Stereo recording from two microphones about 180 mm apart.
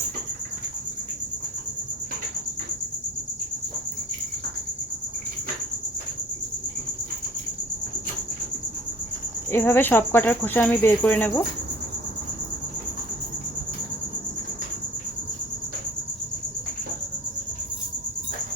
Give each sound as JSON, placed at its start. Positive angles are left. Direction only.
{"t": 9.5, "sound": "speech", "side_deg": 10}